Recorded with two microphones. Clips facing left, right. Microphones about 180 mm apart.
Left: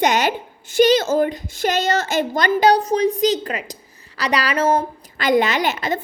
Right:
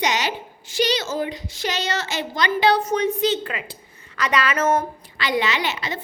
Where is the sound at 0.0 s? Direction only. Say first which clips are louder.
Left 6 dB; 50° left (ahead or behind); by 4.9 s 30° left (ahead or behind).